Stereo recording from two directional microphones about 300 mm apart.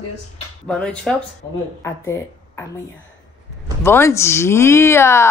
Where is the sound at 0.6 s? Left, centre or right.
Centre.